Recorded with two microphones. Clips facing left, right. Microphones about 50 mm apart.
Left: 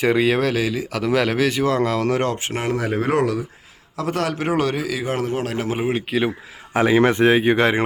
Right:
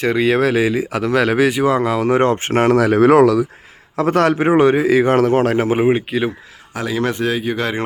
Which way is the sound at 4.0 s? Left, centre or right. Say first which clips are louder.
Right 8 dB; right.